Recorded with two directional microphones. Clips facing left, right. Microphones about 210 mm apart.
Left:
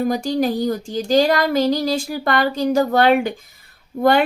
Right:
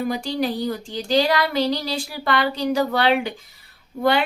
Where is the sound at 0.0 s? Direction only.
45° left (ahead or behind).